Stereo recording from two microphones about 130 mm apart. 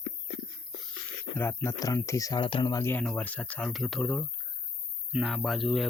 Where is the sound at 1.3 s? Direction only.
15° left (ahead or behind).